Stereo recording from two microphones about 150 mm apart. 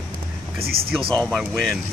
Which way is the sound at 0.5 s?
90° right.